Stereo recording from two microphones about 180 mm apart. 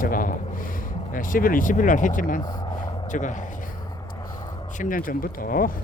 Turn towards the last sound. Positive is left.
turn(degrees=50)  # may be behind; listen again after turning